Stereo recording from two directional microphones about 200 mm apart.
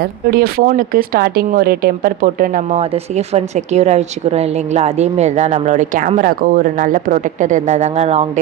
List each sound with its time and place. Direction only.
0.0 s speech: 50° right (ahead or behind); by 8.3 s 30° right (ahead or behind)